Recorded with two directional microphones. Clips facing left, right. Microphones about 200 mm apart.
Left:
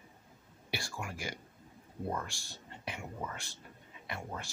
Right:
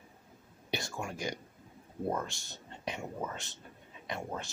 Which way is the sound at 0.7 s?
20° right (ahead or behind).